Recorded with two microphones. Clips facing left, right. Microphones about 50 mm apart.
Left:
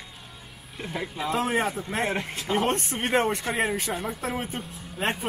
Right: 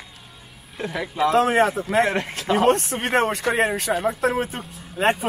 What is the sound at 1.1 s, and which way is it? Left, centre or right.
Speech, right.